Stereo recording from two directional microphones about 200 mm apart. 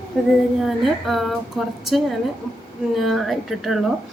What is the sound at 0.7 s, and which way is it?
A woman's voice, centre (ahead or behind).